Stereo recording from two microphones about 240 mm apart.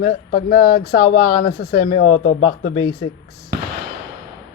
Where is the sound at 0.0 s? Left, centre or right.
Left.